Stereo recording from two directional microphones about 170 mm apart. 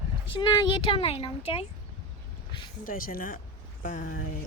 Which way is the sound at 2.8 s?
55° left (ahead or behind).